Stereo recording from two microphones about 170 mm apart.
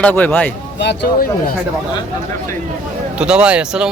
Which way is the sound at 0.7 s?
85° left.